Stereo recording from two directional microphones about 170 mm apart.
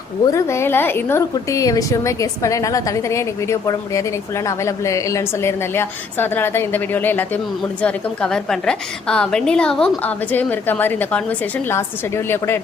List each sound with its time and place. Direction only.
0.3 s a woman's voice: 15° left (ahead or behind)